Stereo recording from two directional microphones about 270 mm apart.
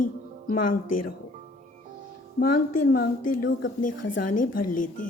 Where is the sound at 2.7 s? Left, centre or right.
Left.